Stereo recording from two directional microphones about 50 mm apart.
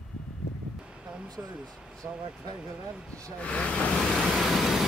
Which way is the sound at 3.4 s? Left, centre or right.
Left.